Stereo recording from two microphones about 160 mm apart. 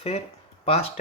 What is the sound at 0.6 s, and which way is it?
Speech, 40° left (ahead or behind).